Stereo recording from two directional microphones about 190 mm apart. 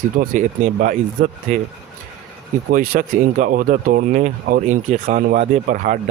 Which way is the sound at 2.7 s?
45° right (ahead or behind).